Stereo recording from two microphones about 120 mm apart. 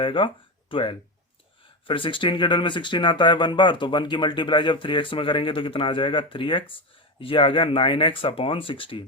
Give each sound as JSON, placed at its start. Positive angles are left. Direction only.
{"t": 0.0, "sound": "speech", "side_deg": 45}